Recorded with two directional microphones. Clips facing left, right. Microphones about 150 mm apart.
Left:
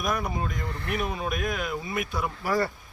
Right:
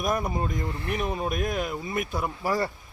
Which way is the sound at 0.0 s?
30° right (ahead or behind).